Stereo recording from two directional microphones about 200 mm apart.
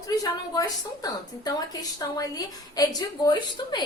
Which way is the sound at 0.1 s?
20° left (ahead or behind).